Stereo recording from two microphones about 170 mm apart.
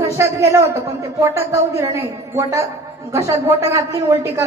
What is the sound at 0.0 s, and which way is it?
Speech, 15° right (ahead or behind).